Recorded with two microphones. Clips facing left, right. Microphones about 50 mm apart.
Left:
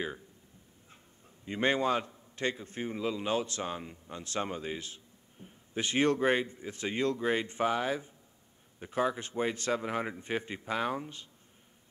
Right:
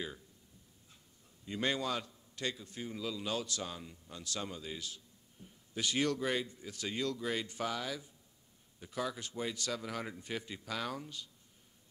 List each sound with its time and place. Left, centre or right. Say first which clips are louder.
1.4 s a man's voice: left 6 dB; left